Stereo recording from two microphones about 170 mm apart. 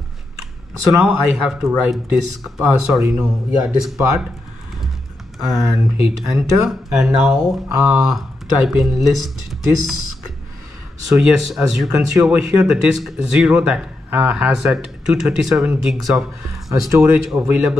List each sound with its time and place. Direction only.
0.8 s speech: centre (ahead or behind)
6.0 s speech: 5° right (ahead or behind)
11.1 s speech: centre (ahead or behind)